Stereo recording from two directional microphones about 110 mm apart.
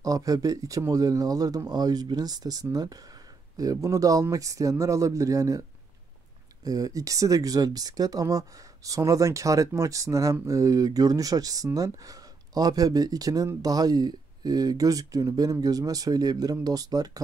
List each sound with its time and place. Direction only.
0.0 s speech: 35° right (ahead or behind)